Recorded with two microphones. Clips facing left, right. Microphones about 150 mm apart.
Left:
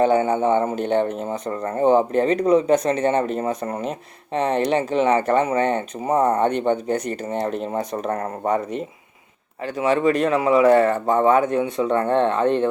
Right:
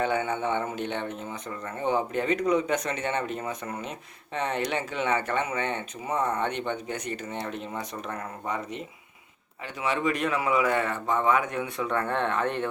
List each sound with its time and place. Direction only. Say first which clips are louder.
0.0 s speech: left 9 dB; 35° left (ahead or behind)